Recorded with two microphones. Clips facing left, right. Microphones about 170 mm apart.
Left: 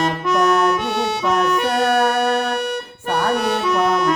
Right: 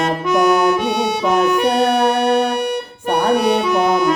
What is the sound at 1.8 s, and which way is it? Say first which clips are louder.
Music: right 2 dB; centre (ahead or behind).